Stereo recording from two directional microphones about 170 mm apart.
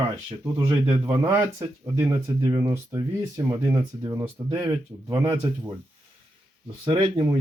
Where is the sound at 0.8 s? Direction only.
20° right (ahead or behind).